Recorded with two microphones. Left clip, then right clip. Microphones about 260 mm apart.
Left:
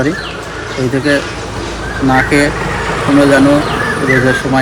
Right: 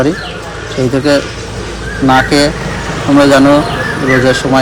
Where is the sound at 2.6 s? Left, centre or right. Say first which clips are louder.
Left 3 dB; centre.